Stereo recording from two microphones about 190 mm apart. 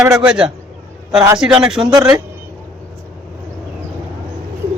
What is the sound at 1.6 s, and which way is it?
Speech, 5° right (ahead or behind).